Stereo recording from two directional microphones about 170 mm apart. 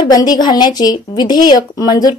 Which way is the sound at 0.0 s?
20° left (ahead or behind).